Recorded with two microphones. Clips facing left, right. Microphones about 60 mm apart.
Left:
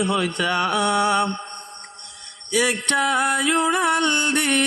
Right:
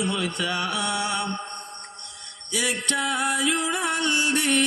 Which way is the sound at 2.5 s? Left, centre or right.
Left.